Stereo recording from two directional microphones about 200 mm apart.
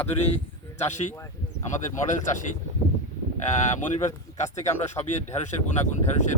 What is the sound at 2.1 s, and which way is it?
Speech, 40° left (ahead or behind).